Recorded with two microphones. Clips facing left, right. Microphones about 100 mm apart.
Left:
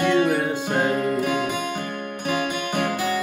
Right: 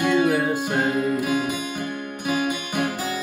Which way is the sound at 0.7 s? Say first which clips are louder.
Even; 55° left (ahead or behind).